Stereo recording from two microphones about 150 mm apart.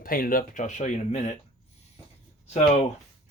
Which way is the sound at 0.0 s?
70° left (ahead or behind).